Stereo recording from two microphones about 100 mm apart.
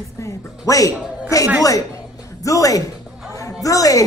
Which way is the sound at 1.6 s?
35° left (ahead or behind).